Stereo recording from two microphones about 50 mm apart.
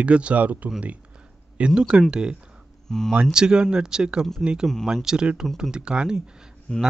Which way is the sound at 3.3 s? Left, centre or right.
Centre.